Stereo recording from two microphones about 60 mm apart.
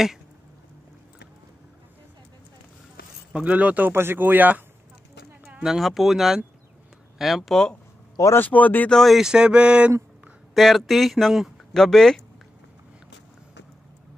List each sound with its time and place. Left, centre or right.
3.3 s speech: right
3.9 s speech: right
5.6 s speech: centre
8.4 s speech: left
8.9 s speech: centre
9.2 s a sound: centre
10.5 s speech: centre